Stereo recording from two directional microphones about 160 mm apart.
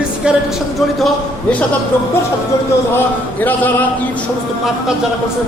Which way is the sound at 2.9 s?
10° left (ahead or behind).